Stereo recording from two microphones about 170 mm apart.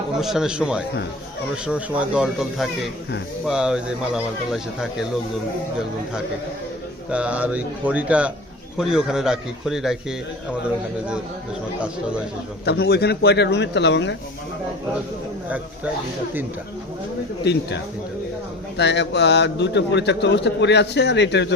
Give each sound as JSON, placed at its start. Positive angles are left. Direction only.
{"t": 0.2, "sound": "speech", "side_deg": 0}
{"t": 7.1, "sound": "speech", "side_deg": -5}
{"t": 12.6, "sound": "a man's voice", "side_deg": 70}
{"t": 15.4, "sound": "speech", "side_deg": -10}
{"t": 17.4, "sound": "a man's voice", "side_deg": 85}
{"t": 18.8, "sound": "a man's voice", "side_deg": 85}